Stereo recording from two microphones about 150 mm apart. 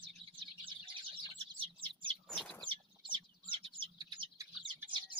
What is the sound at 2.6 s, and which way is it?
Bird, 35° right (ahead or behind).